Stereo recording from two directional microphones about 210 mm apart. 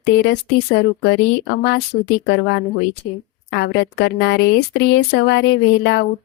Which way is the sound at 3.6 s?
55° left (ahead or behind).